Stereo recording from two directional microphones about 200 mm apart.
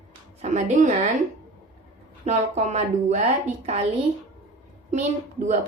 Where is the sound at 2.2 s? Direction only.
35° right (ahead or behind).